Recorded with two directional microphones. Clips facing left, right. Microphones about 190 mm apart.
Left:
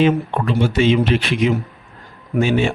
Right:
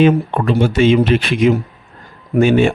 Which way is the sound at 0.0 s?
50° right (ahead or behind).